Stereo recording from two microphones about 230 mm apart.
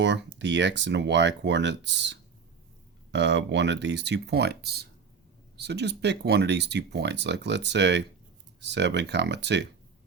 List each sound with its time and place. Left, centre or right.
0.0 s speech: right